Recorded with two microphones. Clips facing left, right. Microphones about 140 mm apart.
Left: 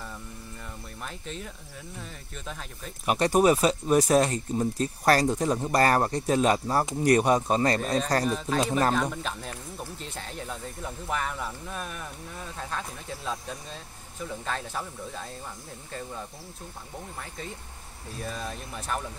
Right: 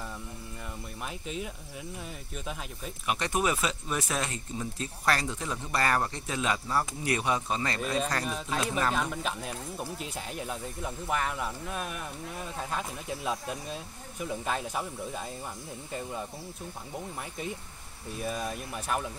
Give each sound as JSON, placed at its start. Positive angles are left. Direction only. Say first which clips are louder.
{"t": 1.0, "sound": "speech", "louder": "right 2 dB", "side_deg": -10}
{"t": 3.1, "sound": "speech", "louder": "left 8 dB", "side_deg": 40}
{"t": 8.3, "sound": "speech", "louder": "left 5 dB", "side_deg": -5}
{"t": 8.5, "sound": "speech", "louder": "left 4 dB", "side_deg": 40}
{"t": 8.9, "sound": "speech", "louder": "left 3 dB", "side_deg": -5}
{"t": 18.2, "sound": "speech", "louder": "right 2 dB", "side_deg": -10}